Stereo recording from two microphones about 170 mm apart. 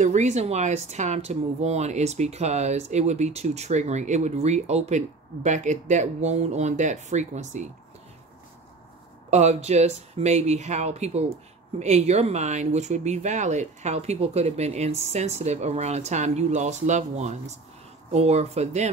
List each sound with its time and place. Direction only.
0.0 s speech: 45° right (ahead or behind)
9.3 s speech: 40° right (ahead or behind)